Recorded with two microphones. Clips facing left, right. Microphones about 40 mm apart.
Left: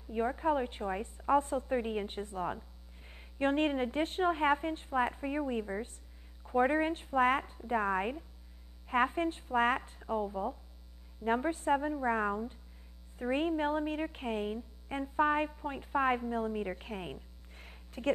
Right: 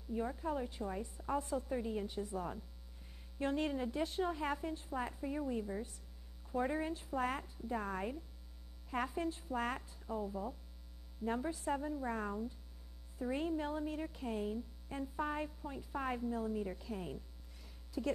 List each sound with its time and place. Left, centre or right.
0.1 s a woman's voice: left